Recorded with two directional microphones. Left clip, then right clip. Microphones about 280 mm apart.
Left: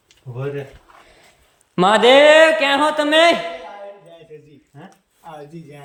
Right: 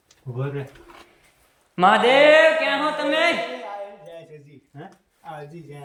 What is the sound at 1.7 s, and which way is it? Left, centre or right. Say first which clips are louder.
Speech: left 4 dB; left.